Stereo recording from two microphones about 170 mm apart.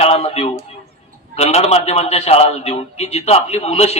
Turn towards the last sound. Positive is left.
turn(degrees=40)  # may be behind; listen again after turning